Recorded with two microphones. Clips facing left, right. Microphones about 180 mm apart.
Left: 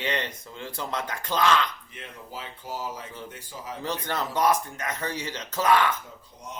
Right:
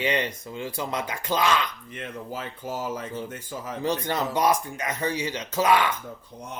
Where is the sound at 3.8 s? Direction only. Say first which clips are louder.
Right 4 dB; 15° right (ahead or behind).